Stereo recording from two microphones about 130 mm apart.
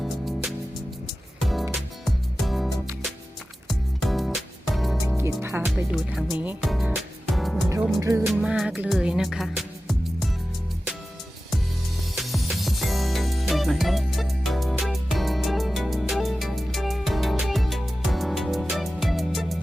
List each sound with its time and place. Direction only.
1.4 s music: centre (ahead or behind)
5.0 s music: 20° right (ahead or behind)
5.7 s speech: 5° right (ahead or behind)
6.6 s music: centre (ahead or behind)
8.0 s music: 25° right (ahead or behind)
8.3 s music: 5° right (ahead or behind)
12.1 s music: centre (ahead or behind)